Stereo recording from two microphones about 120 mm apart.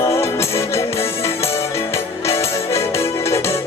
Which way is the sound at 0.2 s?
20° left (ahead or behind).